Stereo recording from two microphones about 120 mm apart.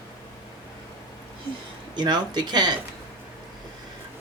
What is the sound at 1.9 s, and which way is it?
Speech, 35° right (ahead or behind).